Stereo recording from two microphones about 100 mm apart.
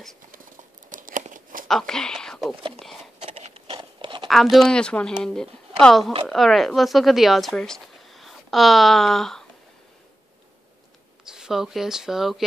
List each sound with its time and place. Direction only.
1.7 s speech: 5° left (ahead or behind)
2.5 s speech: 60° right (ahead or behind)
3.2 s a sound: 90° right
3.7 s a sound: 55° right (ahead or behind)
4.3 s speech: centre (ahead or behind)
11.2 s speech: 5° right (ahead or behind)